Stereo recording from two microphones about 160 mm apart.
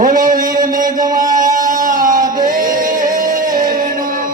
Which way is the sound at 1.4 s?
60° right (ahead or behind).